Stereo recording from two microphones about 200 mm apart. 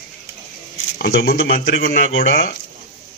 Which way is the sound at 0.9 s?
50° left (ahead or behind).